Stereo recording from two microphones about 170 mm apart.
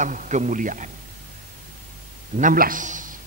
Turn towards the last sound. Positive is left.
turn(degrees=-50)  # may be behind; listen again after turning